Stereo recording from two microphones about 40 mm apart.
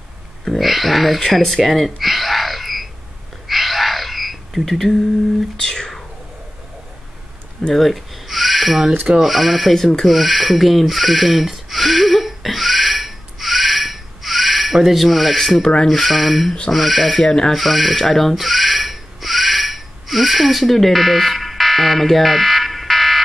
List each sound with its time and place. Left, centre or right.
0.5 s speech: centre
3.4 s bird: centre
5.6 s whispering: centre
7.7 s speech: centre
11.7 s a sound: centre
15.6 s speech: left
15.9 s speech: centre
17.5 s a sound: centre